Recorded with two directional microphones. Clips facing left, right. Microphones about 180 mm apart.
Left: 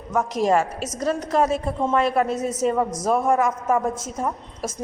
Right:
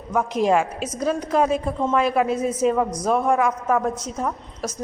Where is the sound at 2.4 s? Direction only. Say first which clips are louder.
Right 2 dB; 45° left (ahead or behind).